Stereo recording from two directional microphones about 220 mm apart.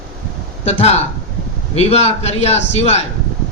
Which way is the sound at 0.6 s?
30° left (ahead or behind).